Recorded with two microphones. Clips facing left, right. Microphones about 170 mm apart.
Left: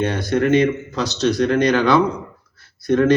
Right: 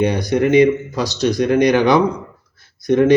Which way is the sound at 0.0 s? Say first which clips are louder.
Right 3 dB; 15° right (ahead or behind).